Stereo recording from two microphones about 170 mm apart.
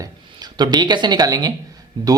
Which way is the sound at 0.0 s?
25° right (ahead or behind).